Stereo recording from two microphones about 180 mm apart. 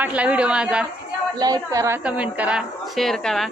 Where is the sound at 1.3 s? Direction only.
20° right (ahead or behind).